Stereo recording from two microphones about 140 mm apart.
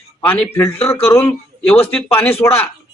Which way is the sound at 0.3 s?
15° left (ahead or behind).